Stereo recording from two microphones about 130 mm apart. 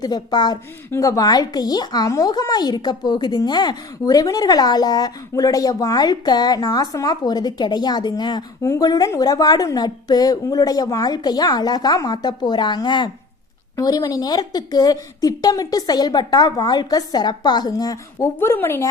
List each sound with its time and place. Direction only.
0.0 s speech: 30° left (ahead or behind)
18.3 s speech: 15° left (ahead or behind)